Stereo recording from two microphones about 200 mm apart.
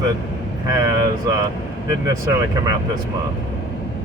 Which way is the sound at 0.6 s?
20° right (ahead or behind).